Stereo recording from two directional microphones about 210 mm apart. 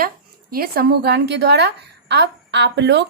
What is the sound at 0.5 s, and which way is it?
A woman's voice, 45° right (ahead or behind).